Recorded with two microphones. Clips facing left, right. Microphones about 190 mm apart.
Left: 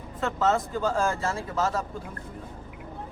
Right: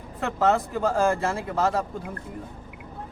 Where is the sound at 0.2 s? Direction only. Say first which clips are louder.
Right 2 dB; 60° right (ahead or behind).